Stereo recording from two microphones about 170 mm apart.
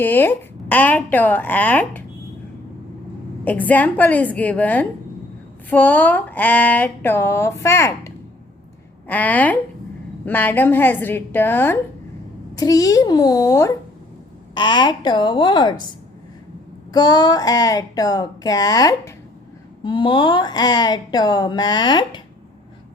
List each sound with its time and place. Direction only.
0.0 s speech: 10° left (ahead or behind)
3.4 s a woman's voice: 10° left (ahead or behind); by 15.8 s 25° left (ahead or behind)
16.9 s a woman's voice: 25° left (ahead or behind)